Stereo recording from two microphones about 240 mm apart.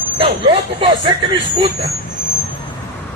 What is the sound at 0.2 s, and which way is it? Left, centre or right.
Speech, right.